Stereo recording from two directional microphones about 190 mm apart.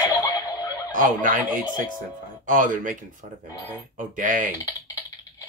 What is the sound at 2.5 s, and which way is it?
Speech, 45° right (ahead or behind).